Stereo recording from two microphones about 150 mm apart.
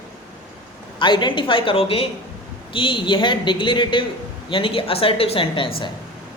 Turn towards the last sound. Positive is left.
turn(degrees=40)  # may be behind; listen again after turning